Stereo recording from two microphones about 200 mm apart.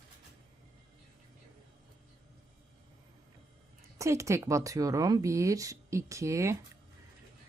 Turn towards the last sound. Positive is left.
turn(degrees=-15)  # may be behind; listen again after turning